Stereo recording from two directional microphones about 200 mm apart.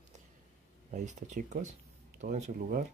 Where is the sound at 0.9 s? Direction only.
35° right (ahead or behind).